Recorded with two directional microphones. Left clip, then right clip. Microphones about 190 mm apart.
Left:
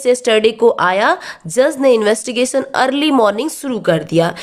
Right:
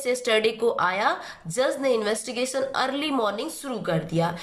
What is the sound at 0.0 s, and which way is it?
A woman's voice, 40° left (ahead or behind).